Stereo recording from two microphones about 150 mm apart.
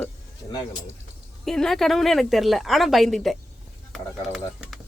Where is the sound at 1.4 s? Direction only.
Centre (ahead or behind).